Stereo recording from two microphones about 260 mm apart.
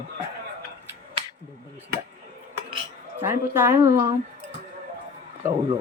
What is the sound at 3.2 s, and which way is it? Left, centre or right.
Speech, centre.